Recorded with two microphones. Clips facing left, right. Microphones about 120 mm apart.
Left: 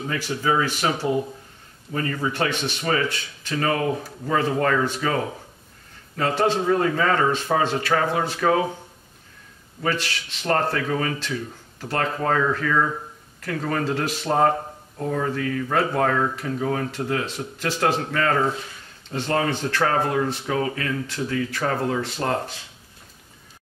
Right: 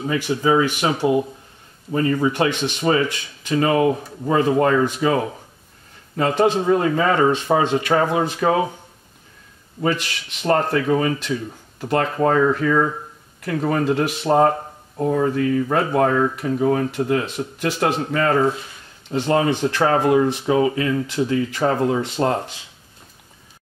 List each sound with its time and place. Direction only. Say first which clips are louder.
0.0 s speech: right 5 dB; 15° right (ahead or behind)
2.2 s speech: right 5 dB; 15° right (ahead or behind)
9.8 s speech: right 3 dB; 15° right (ahead or behind)